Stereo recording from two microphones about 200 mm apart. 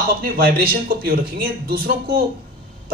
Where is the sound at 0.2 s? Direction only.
50° right (ahead or behind).